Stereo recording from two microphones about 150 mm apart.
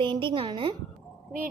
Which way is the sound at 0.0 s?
35° right (ahead or behind).